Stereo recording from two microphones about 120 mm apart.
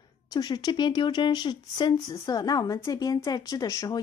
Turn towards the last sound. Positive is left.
turn(degrees=30)  # may be behind; listen again after turning